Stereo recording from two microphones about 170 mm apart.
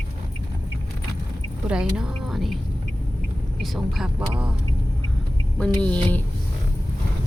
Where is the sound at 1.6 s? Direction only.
5° right (ahead or behind).